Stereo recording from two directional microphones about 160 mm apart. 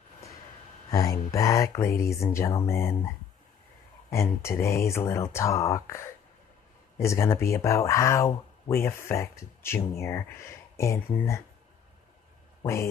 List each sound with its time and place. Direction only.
0.8 s speech: 20° left (ahead or behind)
4.1 s speech: 15° left (ahead or behind)